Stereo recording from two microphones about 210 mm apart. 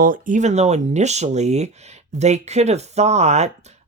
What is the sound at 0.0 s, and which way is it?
Speech, 40° right (ahead or behind).